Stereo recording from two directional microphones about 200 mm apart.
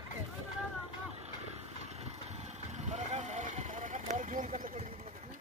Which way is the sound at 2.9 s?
35° right (ahead or behind).